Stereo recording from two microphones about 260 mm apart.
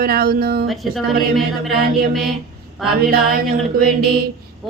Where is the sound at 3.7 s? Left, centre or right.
Right.